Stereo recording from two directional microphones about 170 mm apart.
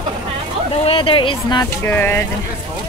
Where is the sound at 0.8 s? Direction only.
30° left (ahead or behind).